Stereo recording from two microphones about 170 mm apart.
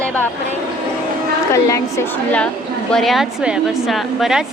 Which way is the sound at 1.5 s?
15° left (ahead or behind).